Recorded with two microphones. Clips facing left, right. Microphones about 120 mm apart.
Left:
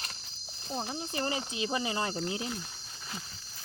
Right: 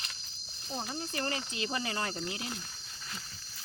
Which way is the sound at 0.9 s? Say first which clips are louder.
Left 1 dB; 20° left (ahead or behind).